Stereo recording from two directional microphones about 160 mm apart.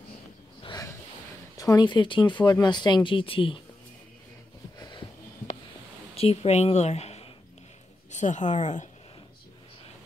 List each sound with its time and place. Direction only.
0.6 s a sound: 30° left (ahead or behind)
1.6 s speech: 25° left (ahead or behind)
6.1 s a woman's voice: 40° left (ahead or behind)